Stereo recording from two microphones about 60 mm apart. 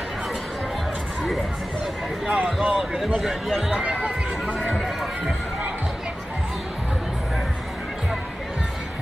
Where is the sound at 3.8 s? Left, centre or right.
Centre.